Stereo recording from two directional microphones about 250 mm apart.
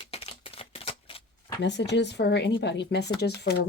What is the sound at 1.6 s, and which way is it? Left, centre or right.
Speech, left.